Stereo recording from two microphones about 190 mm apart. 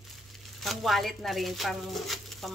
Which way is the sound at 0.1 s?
Centre (ahead or behind).